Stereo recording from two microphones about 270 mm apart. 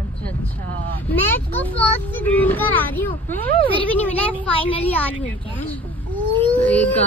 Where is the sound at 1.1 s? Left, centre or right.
Centre.